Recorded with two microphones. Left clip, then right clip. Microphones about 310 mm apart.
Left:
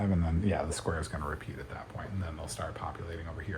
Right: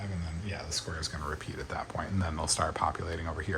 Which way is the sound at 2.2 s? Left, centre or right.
Centre.